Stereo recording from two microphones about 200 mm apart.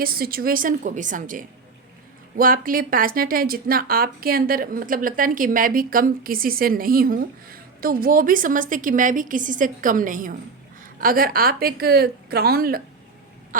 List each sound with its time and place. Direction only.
0.0 s speech: 45° right (ahead or behind)